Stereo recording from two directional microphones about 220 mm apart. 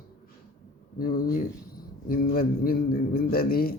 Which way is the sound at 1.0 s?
40° left (ahead or behind).